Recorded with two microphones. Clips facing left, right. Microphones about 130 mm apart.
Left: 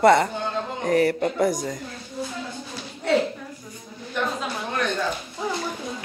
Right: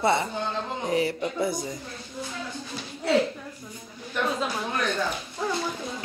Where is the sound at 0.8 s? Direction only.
55° left (ahead or behind).